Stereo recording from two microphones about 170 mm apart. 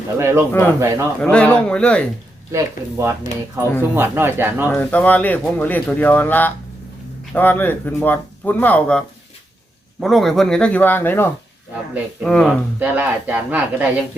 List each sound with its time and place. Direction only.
0.2 s speech: 15° right (ahead or behind)
1.2 s speech: 5° left (ahead or behind)
2.5 s speech: 15° right (ahead or behind)
4.7 s speech: 10° left (ahead or behind)
12.8 s speech: 10° right (ahead or behind)